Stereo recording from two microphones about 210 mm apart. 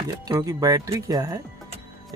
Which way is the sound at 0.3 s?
15° right (ahead or behind).